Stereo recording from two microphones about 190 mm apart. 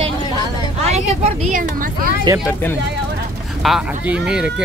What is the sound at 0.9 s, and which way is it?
Speech, 35° right (ahead or behind).